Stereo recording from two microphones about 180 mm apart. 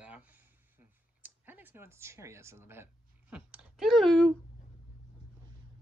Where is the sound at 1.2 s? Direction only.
10° right (ahead or behind).